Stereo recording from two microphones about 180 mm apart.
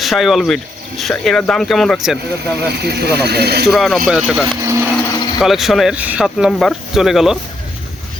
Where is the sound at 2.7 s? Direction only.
65° right (ahead or behind).